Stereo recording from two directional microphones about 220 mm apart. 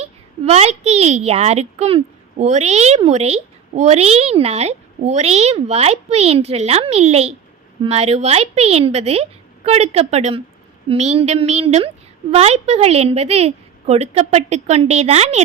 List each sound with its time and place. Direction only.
0.0 s a woman's voice: 30° right (ahead or behind)